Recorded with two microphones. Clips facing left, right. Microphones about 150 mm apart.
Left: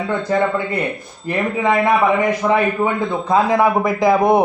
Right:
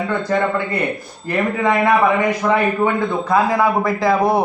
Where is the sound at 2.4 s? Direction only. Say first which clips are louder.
Right 1 dB; 15° left (ahead or behind).